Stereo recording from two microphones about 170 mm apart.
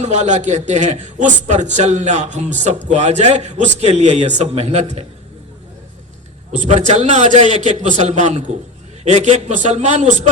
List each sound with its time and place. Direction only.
0.0 s a man's voice: 45° right (ahead or behind)
6.5 s a man's voice: 45° right (ahead or behind)